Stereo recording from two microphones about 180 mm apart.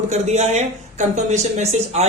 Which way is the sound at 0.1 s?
40° right (ahead or behind).